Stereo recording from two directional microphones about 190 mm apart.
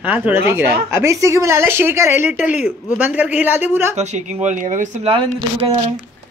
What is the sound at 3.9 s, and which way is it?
Speech, 35° right (ahead or behind).